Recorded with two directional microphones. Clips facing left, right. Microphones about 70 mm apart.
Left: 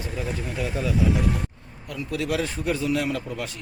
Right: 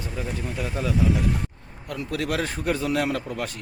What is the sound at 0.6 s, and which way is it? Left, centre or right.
A man's voice, right.